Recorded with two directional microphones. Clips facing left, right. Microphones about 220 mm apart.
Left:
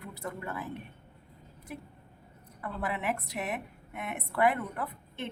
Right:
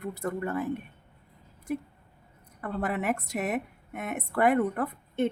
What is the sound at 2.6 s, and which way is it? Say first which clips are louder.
A woman's voice: right 4 dB; 45° right (ahead or behind).